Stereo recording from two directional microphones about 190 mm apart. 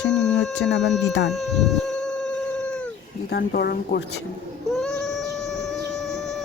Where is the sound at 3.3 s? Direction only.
50° left (ahead or behind).